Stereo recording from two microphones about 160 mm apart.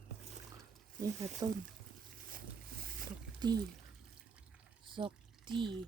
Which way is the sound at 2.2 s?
60° right (ahead or behind).